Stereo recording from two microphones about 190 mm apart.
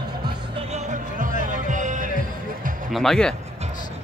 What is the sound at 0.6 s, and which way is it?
Music, 35° right (ahead or behind).